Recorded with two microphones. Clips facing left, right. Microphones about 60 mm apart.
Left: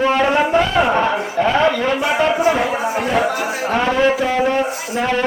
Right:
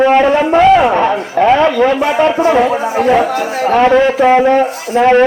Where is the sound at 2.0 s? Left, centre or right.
Right.